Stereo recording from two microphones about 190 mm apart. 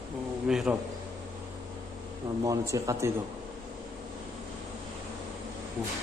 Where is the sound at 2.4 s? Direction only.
15° right (ahead or behind).